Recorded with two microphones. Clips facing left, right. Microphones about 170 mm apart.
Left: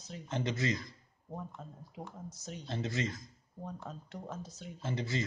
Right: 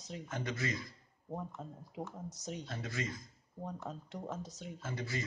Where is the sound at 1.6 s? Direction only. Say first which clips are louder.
Right 2 dB; 20° right (ahead or behind).